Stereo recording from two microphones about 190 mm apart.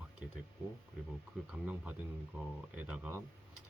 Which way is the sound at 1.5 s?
5° right (ahead or behind).